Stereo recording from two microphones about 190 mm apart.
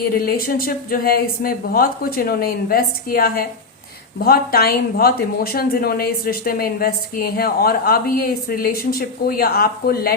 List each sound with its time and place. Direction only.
0.1 s speech: 50° left (ahead or behind)